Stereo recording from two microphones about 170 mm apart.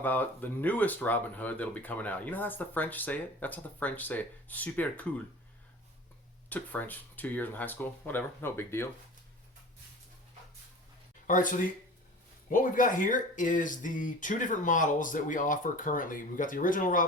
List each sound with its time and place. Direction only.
0.0 s speech: 10° left (ahead or behind)
6.5 s speech: 10° left (ahead or behind)
11.3 s speech: 50° left (ahead or behind)